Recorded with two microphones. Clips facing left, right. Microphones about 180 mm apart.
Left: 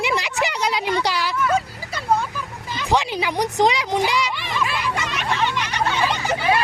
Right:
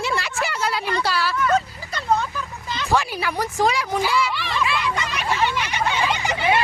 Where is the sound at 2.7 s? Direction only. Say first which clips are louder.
Left 1 dB; 20° left (ahead or behind).